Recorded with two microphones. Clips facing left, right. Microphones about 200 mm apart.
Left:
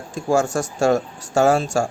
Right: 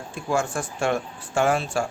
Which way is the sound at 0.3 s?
40° left (ahead or behind).